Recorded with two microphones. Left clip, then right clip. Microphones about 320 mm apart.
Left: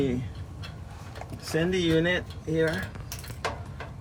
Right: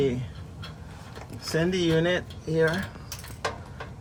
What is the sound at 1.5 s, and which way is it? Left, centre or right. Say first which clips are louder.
Speech: right 1 dB; centre.